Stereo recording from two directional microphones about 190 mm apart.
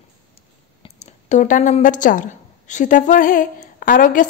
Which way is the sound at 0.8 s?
35° left (ahead or behind).